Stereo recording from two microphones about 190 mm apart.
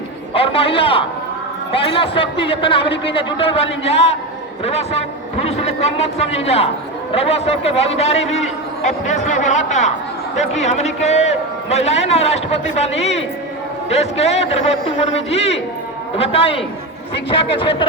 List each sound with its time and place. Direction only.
0.3 s a man's voice: 30° left (ahead or behind)